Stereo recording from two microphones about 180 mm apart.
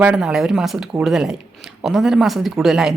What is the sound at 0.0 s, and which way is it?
A woman's voice, 5° right (ahead or behind).